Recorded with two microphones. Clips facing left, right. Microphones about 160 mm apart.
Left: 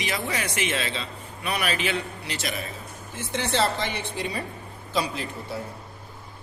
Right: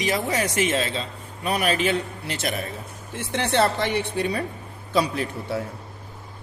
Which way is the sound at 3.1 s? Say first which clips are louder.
Right 3 dB; 65° right (ahead or behind).